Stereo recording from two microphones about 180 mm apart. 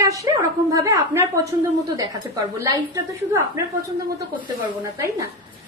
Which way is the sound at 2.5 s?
20° right (ahead or behind).